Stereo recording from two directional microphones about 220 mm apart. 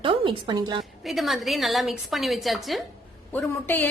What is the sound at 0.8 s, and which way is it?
A woman's voice, centre (ahead or behind).